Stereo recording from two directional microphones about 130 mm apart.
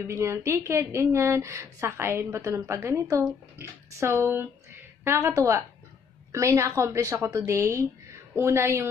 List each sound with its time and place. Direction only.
0.0 s speech: 25° right (ahead or behind)